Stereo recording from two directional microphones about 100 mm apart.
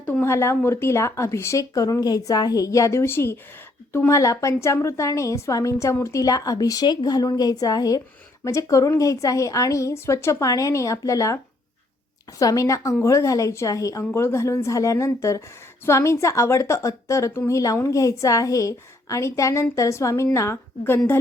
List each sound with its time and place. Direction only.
0.0 s a woman's voice: 20° left (ahead or behind)
12.4 s a woman's voice: 35° left (ahead or behind)